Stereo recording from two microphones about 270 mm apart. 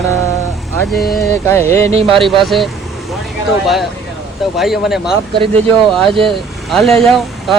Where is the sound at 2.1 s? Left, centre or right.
Centre.